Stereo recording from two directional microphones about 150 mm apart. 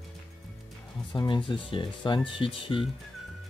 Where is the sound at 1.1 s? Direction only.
30° left (ahead or behind).